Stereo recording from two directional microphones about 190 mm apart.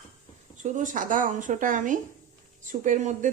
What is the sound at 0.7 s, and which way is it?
Speech, 40° right (ahead or behind).